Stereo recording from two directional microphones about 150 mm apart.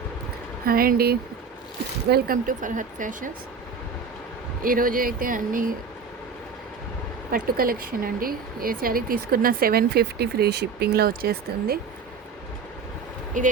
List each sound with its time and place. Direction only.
0.6 s speech: 80° right; by 3.3 s 60° right (ahead or behind)
4.6 s speech: 70° right (ahead or behind)
7.3 s speech: 80° right
13.4 s speech: 55° right (ahead or behind)